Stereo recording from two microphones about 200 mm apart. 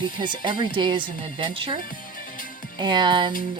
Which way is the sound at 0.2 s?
25° right (ahead or behind).